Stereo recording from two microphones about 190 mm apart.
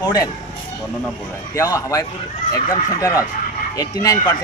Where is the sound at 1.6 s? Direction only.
15° left (ahead or behind).